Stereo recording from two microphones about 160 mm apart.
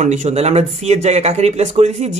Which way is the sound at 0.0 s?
45° right (ahead or behind).